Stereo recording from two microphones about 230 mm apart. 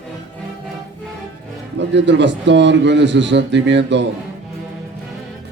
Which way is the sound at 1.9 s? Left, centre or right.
Right.